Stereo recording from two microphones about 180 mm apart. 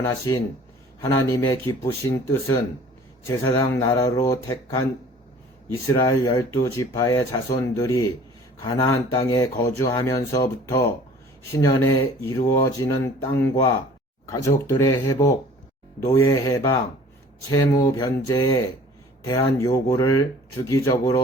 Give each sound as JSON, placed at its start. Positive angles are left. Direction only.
{"t": 0.0, "sound": "speech", "side_deg": 20}